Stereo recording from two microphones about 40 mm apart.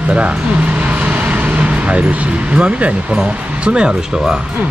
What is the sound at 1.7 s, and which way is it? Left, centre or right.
Speech, right.